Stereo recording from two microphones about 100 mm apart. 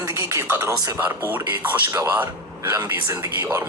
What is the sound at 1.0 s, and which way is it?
Speech, 20° right (ahead or behind).